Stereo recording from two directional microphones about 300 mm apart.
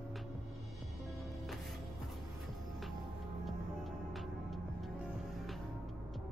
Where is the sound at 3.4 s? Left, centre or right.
Centre.